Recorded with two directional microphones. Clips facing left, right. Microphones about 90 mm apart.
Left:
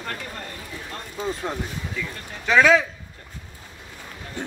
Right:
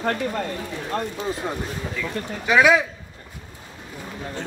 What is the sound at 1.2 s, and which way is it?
Speech, centre (ahead or behind).